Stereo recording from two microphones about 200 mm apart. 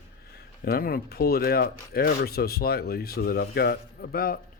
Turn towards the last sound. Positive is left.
turn(degrees=45)  # may be behind; listen again after turning